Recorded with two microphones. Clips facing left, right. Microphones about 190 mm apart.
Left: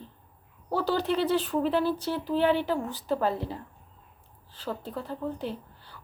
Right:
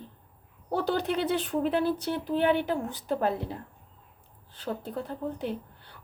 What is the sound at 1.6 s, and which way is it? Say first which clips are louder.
Speech: even; 55° right (ahead or behind).